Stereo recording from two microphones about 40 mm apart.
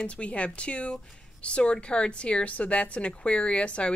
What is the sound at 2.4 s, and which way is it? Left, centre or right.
Speech, left.